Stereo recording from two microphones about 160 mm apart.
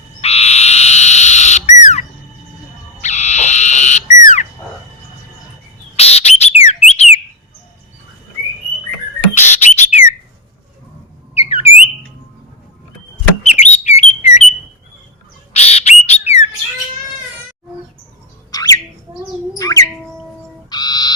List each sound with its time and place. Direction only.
0.2 s frog: 40° left (ahead or behind)
1.8 s bird: 45° left (ahead or behind)
3.0 s frog: 45° left (ahead or behind)
6.0 s bird: 40° left (ahead or behind)
9.3 s bird: 50° left (ahead or behind)
11.3 s a sound: 40° left (ahead or behind)
13.5 s bird: 45° left (ahead or behind)
15.5 s bird: 45° left (ahead or behind)
18.5 s bird: 20° left (ahead or behind)
20.7 s owl: 25° left (ahead or behind)